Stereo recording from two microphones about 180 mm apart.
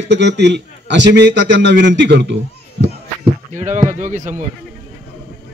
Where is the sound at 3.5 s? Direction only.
40° right (ahead or behind).